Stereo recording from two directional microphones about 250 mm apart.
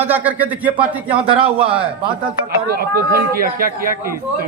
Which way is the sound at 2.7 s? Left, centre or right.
Right.